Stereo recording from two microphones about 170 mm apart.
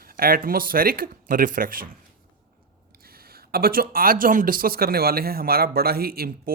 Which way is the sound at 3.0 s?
65° right (ahead or behind).